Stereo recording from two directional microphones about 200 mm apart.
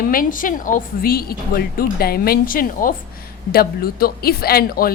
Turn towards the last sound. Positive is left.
turn(degrees=50)  # may be behind; listen again after turning